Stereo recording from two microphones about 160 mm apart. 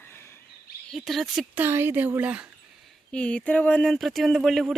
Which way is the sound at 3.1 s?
5° left (ahead or behind).